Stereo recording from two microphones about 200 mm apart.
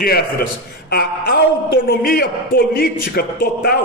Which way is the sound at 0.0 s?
50° left (ahead or behind).